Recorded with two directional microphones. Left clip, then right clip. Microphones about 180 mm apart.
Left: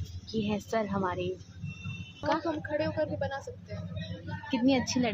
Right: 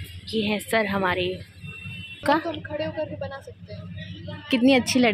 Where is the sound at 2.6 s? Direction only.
5° left (ahead or behind).